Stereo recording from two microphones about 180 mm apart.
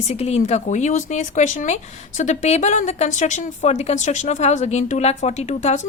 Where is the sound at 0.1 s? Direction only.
35° left (ahead or behind).